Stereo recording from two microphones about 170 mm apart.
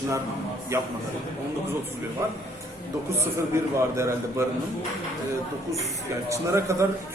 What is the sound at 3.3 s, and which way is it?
A man's voice, 15° right (ahead or behind).